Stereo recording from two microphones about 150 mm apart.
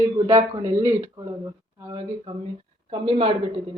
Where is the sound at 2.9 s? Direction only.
35° right (ahead or behind).